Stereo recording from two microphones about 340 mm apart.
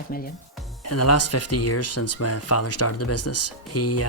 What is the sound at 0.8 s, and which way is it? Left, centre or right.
Speech, left.